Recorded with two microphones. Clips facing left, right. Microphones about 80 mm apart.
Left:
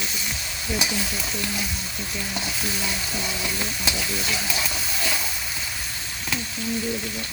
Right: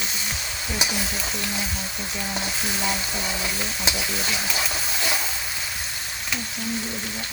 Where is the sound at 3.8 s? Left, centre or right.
Right.